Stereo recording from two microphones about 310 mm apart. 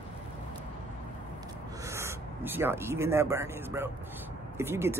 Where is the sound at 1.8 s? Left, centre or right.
Centre.